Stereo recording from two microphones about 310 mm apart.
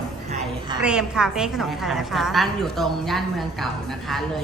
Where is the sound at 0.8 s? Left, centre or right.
Centre.